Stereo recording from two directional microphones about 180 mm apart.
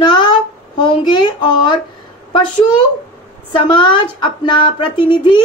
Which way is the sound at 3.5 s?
25° left (ahead or behind).